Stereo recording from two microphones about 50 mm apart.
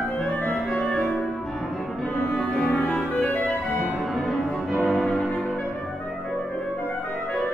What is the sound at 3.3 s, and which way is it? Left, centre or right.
Clarinet, left.